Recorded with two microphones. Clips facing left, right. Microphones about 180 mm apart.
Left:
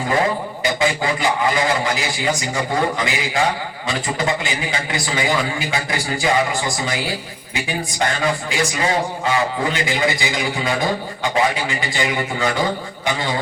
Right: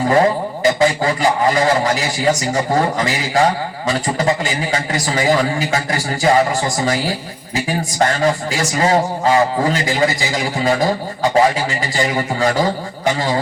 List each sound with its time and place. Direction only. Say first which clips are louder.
0.6 s a man's voice: right 6 dB; 40° right (ahead or behind)